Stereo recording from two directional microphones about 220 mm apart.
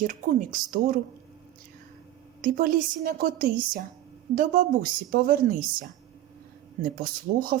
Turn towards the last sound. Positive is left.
turn(degrees=-40)  # may be behind; listen again after turning